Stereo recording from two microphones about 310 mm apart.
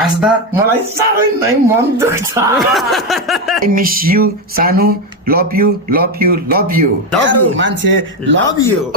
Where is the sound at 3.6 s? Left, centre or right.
Right.